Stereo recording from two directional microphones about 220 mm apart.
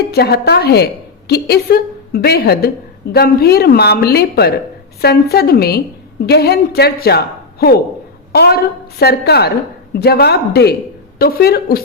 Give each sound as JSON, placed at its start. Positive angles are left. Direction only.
{"t": 0.0, "sound": "a woman's voice", "side_deg": 45}